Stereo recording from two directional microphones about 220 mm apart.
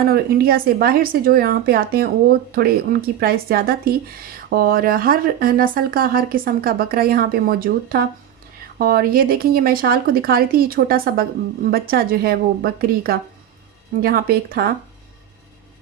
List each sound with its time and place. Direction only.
0.1 s speech: 45° right (ahead or behind)